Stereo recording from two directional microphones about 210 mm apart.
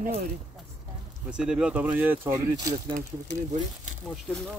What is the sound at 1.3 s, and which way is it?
Speech, 5° right (ahead or behind).